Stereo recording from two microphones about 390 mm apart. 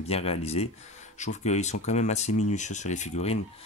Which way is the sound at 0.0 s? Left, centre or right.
Centre.